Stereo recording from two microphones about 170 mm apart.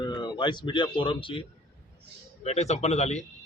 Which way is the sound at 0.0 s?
25° left (ahead or behind).